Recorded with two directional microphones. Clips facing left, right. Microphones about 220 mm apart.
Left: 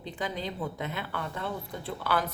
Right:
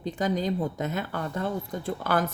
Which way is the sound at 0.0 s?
45° right (ahead or behind).